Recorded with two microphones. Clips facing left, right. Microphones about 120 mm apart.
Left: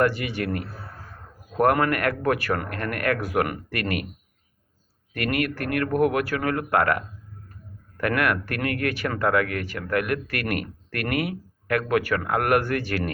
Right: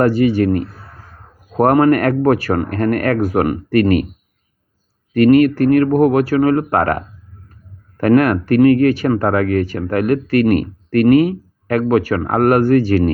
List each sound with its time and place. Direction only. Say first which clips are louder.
0.0 s speech: right 10 dB; 35° right (ahead or behind)
5.1 s speech: right 16 dB; 35° right (ahead or behind)